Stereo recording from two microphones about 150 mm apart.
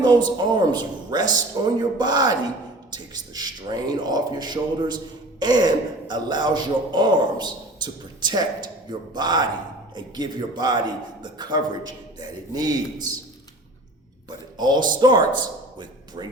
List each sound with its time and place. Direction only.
0.0 s a man's voice: 30° right (ahead or behind)
14.3 s speech: 30° right (ahead or behind)